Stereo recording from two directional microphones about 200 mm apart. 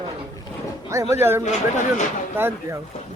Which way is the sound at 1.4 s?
35° left (ahead or behind).